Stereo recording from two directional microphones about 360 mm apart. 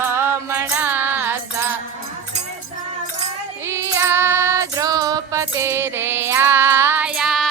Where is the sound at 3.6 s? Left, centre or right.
Centre.